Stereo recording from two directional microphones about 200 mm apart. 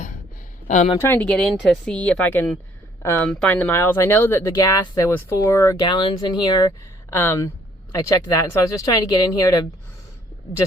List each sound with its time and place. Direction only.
1.0 s speech: 10° left (ahead or behind)